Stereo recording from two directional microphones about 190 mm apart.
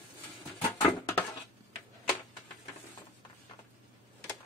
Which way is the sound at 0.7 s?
10° left (ahead or behind).